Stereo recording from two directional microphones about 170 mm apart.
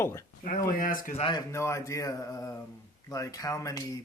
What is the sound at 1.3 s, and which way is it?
Speech, 15° left (ahead or behind).